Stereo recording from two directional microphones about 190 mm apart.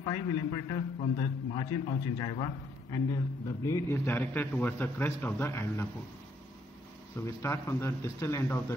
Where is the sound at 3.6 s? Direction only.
15° left (ahead or behind).